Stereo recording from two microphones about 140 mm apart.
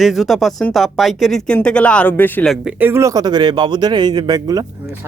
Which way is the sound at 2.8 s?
15° right (ahead or behind).